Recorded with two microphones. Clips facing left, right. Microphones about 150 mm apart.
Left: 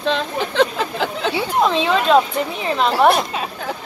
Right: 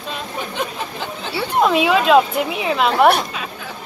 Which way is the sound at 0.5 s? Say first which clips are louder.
Left 11 dB; 90° left.